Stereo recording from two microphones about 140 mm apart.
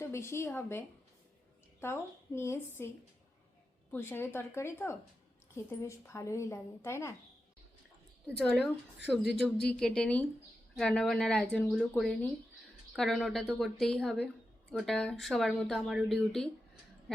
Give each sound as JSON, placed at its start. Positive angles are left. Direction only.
{"t": 0.0, "sound": "a woman's voice", "side_deg": 20}
{"t": 3.9, "sound": "a woman's voice", "side_deg": 15}
{"t": 8.3, "sound": "speech", "side_deg": 5}